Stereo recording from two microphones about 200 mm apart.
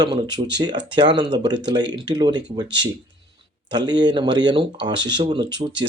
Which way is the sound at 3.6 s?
20° right (ahead or behind).